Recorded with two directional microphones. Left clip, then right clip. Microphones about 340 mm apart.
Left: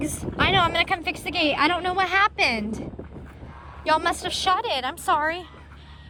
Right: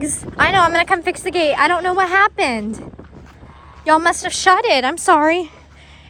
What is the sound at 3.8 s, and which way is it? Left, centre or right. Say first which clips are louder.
Speech: right 8 dB; centre.